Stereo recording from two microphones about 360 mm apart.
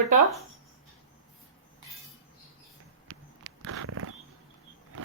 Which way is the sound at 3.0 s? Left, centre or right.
Right.